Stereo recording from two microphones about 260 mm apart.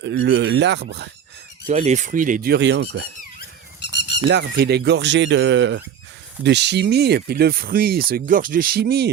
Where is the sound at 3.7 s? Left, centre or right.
Left.